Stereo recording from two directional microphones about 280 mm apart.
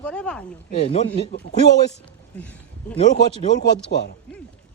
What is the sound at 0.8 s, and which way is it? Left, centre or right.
Speech, left.